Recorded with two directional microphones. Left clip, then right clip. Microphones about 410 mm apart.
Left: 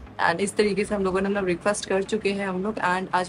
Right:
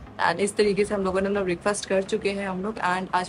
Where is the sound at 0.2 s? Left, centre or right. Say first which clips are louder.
Even; centre.